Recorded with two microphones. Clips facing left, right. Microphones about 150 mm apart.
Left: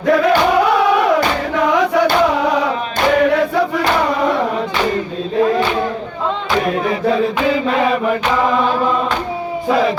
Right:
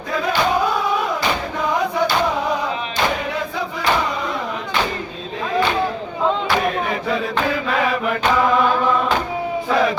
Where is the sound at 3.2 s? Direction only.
70° left (ahead or behind).